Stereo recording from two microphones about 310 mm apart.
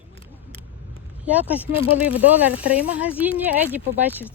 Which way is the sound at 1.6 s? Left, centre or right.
Centre.